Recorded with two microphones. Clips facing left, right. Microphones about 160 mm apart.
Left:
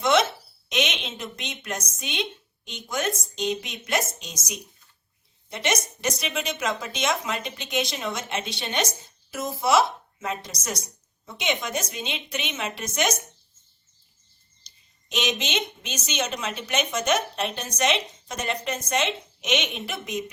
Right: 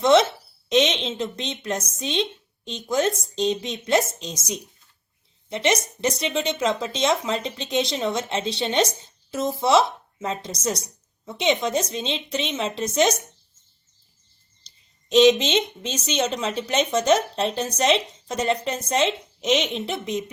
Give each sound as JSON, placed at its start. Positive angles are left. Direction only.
{"t": 0.0, "sound": "a woman's voice", "side_deg": -30}
{"t": 15.1, "sound": "speech", "side_deg": -30}